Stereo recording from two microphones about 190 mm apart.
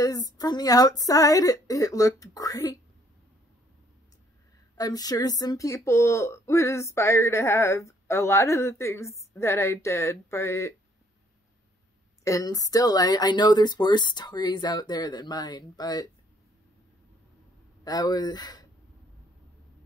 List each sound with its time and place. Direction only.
0.0 s speech: 20° left (ahead or behind)
4.7 s speech: 20° left (ahead or behind)
12.3 s speech: 20° left (ahead or behind)
17.8 s speech: 20° left (ahead or behind)